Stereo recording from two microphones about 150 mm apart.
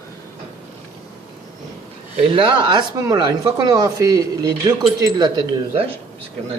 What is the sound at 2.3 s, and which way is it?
Speech, 35° right (ahead or behind).